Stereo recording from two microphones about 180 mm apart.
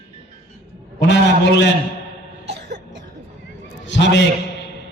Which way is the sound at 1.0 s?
75° left (ahead or behind).